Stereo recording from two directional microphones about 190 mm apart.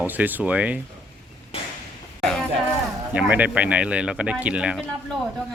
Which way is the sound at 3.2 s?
10° right (ahead or behind).